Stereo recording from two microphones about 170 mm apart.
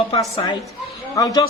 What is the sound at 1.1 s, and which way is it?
Speech, 20° left (ahead or behind).